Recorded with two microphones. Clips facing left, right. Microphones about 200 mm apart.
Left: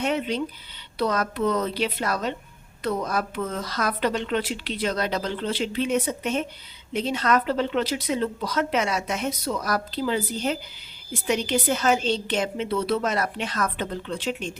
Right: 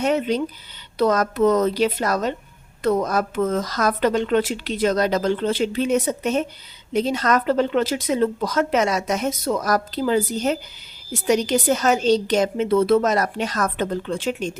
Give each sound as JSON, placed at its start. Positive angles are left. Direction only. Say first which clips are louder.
{"t": 0.0, "sound": "a woman's voice", "louder": "right 5 dB", "side_deg": -45}